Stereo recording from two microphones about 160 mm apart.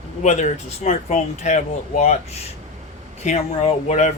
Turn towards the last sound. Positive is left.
turn(degrees=45)  # may be behind; listen again after turning